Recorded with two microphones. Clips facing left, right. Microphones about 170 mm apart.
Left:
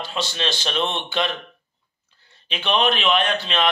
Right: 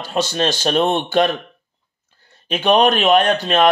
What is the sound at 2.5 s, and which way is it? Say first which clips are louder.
A man's voice: right 7 dB; 45° right (ahead or behind).